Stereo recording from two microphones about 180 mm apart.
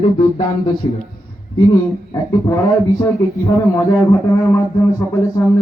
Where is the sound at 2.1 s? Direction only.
20° left (ahead or behind).